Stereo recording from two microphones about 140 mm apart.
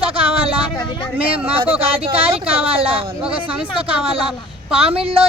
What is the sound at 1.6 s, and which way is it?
A woman's voice, 40° right (ahead or behind).